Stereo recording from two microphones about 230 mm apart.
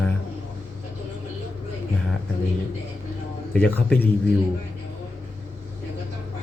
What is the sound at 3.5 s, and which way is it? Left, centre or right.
Speech, centre.